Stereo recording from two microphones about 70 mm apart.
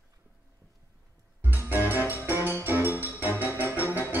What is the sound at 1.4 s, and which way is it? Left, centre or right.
Music, right.